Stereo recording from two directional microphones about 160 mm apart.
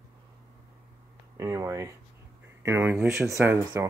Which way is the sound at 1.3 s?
20° right (ahead or behind).